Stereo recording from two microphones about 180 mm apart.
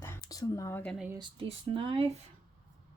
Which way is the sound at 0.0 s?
15° left (ahead or behind).